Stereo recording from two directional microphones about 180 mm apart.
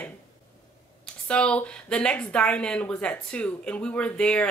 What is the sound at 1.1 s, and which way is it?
Speech, 5° left (ahead or behind).